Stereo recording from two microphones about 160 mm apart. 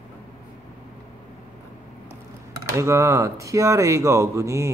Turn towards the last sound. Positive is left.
turn(degrees=-20)  # may be behind; listen again after turning